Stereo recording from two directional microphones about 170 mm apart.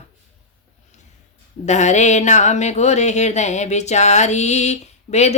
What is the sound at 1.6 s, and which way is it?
A woman's voice, 45° left (ahead or behind).